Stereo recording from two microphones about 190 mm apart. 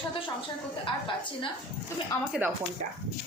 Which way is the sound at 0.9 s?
25° left (ahead or behind).